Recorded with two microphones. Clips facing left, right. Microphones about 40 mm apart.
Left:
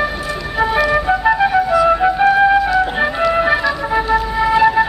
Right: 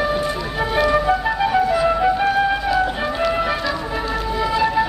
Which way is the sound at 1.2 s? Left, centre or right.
Left.